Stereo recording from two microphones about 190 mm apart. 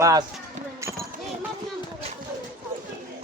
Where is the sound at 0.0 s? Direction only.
20° right (ahead or behind).